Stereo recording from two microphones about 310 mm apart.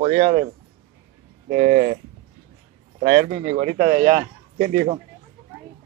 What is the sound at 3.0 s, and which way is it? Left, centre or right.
Speech, right.